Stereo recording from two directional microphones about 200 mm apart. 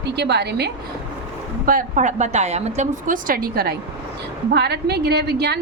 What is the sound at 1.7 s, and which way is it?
A woman's voice, 40° right (ahead or behind).